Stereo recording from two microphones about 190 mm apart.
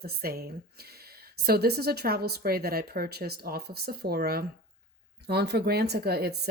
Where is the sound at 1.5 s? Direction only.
55° right (ahead or behind).